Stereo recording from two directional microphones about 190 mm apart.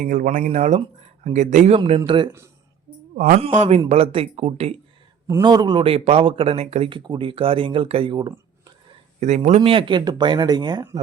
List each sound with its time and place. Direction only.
0.0 s speech: 45° right (ahead or behind)
2.0 s speech: 25° right (ahead or behind)
3.2 s speech: 45° right (ahead or behind)
5.3 s speech: 20° right (ahead or behind)
9.2 s speech: 35° right (ahead or behind)